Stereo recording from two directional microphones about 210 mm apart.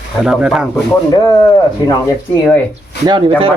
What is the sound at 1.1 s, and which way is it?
Speech, 20° left (ahead or behind).